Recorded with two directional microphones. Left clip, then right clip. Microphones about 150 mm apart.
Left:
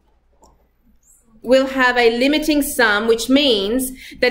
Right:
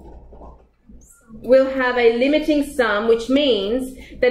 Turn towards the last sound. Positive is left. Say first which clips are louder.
# left 1 dB
turn(degrees=25)  # may be behind; listen again after turning